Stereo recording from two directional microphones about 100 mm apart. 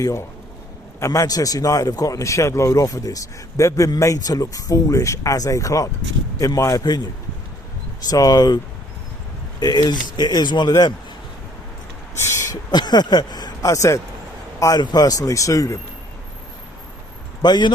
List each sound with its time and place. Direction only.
0.0 s speech: 30° left (ahead or behind)
8.0 s speech: 40° left (ahead or behind)
9.6 s speech: 45° left (ahead or behind)
12.1 s a sound: 30° left (ahead or behind)
12.7 s speech: 45° left (ahead or behind)
17.4 s speech: 45° left (ahead or behind)